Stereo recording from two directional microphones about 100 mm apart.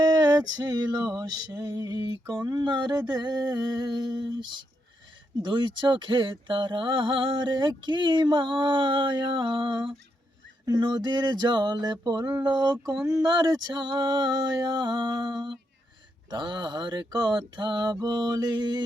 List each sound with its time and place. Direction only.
0.0 s music: 40° right (ahead or behind)
5.5 s music: 50° right (ahead or behind)
10.7 s music: 45° right (ahead or behind)